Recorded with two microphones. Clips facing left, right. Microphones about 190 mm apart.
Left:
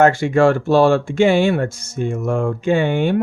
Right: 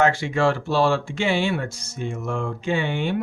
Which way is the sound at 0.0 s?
50° left (ahead or behind).